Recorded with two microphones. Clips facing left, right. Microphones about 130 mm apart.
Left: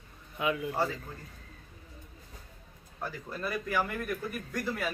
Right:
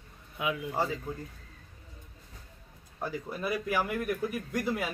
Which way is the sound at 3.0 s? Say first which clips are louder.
Right 3 dB; 15° right (ahead or behind).